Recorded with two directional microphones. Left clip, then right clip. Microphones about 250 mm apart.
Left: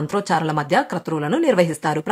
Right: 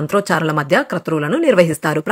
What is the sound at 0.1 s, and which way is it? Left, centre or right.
Speech, centre.